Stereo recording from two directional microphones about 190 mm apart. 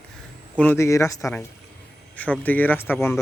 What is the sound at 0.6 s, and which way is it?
Speech, 10° left (ahead or behind).